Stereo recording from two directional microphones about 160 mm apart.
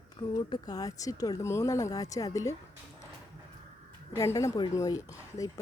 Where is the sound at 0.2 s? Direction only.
25° left (ahead or behind).